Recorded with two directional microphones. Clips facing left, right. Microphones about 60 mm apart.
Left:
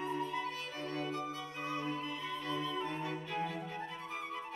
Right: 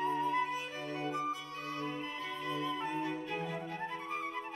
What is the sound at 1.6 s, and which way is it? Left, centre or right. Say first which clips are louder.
Music: left 3 dB; left.